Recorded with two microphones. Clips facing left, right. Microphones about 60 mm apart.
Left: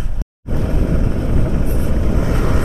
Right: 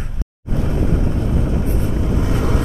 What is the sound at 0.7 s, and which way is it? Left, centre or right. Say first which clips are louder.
Vehicle: even; left.